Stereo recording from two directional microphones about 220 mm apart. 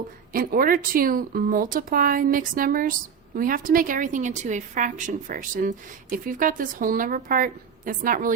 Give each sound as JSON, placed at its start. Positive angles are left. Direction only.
{"t": 0.3, "sound": "a woman's voice", "side_deg": -40}